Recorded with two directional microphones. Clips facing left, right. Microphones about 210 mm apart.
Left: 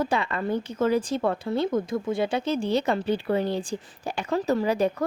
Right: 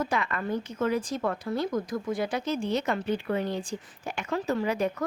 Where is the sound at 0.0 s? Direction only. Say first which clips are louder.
Left 3 dB; 30° left (ahead or behind).